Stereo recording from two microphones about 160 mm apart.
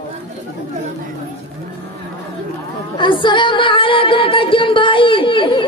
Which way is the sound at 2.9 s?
30° left (ahead or behind).